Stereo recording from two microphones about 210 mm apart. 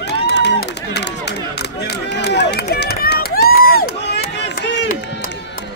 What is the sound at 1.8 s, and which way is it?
Run, 50° left (ahead or behind).